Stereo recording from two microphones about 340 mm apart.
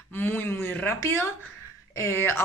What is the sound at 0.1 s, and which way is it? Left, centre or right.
Speech, centre.